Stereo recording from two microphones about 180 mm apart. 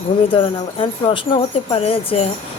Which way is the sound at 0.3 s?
30° left (ahead or behind).